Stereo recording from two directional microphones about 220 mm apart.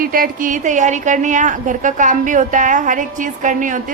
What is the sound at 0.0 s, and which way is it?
A woman's voice, 40° right (ahead or behind).